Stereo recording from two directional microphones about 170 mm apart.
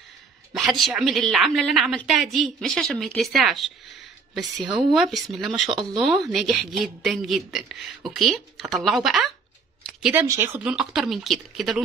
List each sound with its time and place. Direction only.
0.5 s a woman's voice: centre (ahead or behind)
4.6 s speech: 25° right (ahead or behind)
4.9 s a woman's voice: centre (ahead or behind)
10.1 s a woman's voice: 15° right (ahead or behind)